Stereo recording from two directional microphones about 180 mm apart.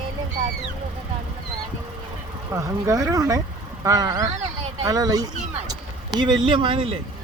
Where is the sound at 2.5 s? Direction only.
15° right (ahead or behind).